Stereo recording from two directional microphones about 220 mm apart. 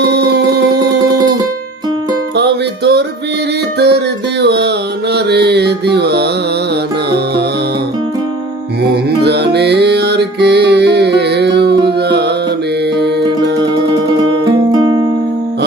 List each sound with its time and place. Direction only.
0.1 s music: 50° right (ahead or behind)
2.3 s music: 50° right (ahead or behind)
5.1 s mantra: 50° right (ahead or behind)
9.2 s music: 50° right (ahead or behind)